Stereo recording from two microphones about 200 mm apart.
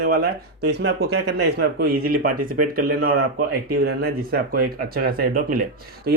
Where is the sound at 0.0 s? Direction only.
50° right (ahead or behind).